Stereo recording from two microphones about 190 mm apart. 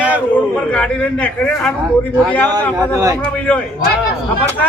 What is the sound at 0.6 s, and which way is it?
A man's voice, 5° left (ahead or behind).